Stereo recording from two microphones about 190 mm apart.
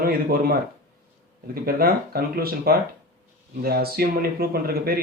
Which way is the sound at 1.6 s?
55° right (ahead or behind).